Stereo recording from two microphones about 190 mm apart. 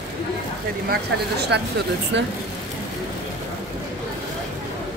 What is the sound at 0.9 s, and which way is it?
A woman's voice, 60° right (ahead or behind).